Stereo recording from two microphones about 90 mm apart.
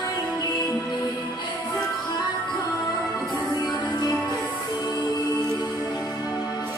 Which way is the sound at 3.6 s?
50° left (ahead or behind).